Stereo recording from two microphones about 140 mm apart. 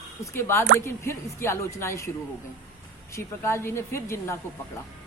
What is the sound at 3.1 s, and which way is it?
Speech, 20° left (ahead or behind).